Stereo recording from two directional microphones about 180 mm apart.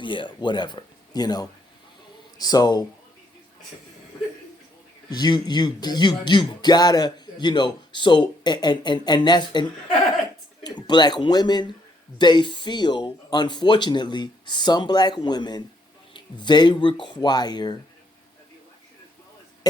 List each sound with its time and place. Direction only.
0.0 s speech: 25° left (ahead or behind)
5.1 s speech: 25° left (ahead or behind)